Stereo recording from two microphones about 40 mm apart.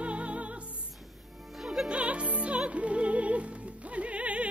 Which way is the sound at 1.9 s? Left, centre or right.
Right.